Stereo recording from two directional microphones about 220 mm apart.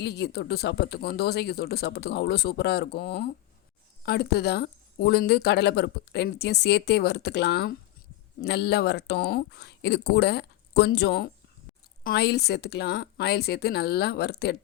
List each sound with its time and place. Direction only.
0.0 s speech: 50° left (ahead or behind)